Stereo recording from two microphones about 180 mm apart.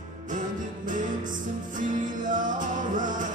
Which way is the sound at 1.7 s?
45° right (ahead or behind).